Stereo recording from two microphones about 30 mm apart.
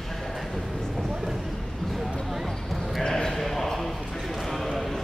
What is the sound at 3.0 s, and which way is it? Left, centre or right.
Basketball bounce, left.